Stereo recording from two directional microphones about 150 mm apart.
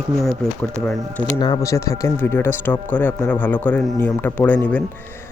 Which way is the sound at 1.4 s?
25° left (ahead or behind).